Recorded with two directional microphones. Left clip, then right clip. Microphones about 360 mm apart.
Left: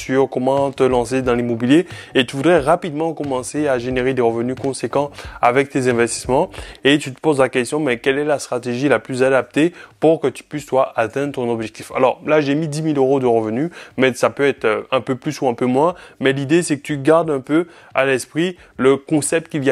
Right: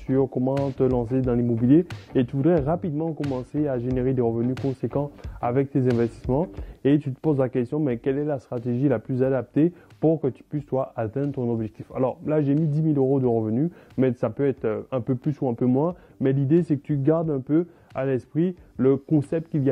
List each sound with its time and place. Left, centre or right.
0.0 s speech: centre
0.3 s speech: left
0.7 s speech: centre